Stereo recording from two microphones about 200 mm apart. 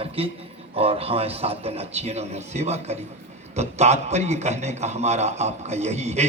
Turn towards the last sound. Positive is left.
turn(degrees=-35)  # may be behind; listen again after turning